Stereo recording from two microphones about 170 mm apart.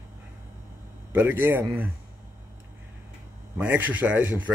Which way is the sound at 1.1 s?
10° right (ahead or behind).